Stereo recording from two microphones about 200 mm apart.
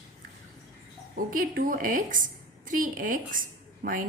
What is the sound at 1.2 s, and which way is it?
A woman's voice, 45° right (ahead or behind).